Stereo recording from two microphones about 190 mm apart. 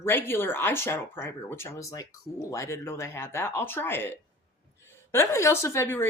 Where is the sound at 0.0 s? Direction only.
10° left (ahead or behind).